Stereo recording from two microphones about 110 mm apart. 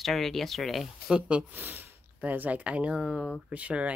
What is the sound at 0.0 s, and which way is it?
Speech, centre (ahead or behind).